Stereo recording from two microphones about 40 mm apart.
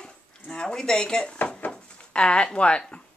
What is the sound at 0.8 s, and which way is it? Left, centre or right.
Speech, centre.